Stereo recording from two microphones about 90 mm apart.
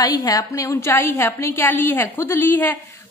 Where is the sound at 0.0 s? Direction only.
45° left (ahead or behind).